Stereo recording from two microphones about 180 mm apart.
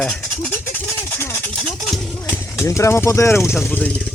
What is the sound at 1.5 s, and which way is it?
Speech, centre (ahead or behind).